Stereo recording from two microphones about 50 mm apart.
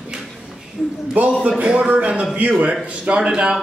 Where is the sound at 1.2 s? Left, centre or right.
Right.